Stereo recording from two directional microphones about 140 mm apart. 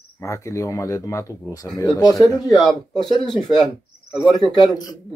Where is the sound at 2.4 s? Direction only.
Centre (ahead or behind).